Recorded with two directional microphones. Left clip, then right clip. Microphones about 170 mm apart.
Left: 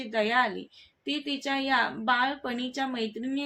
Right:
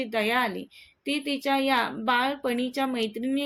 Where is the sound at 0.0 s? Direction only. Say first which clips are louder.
Even; 25° right (ahead or behind).